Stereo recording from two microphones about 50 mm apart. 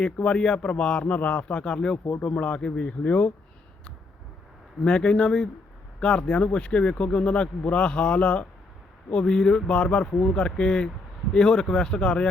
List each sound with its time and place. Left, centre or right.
0.0 s speech: centre
4.8 s speech: centre